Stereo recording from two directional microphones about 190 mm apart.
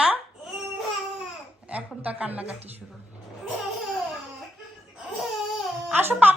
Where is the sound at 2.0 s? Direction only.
5° right (ahead or behind).